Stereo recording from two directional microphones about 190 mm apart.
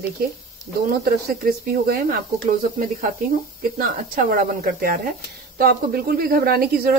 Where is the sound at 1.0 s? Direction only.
55° right (ahead or behind).